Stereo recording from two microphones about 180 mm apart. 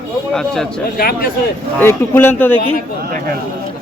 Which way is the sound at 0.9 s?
55° left (ahead or behind).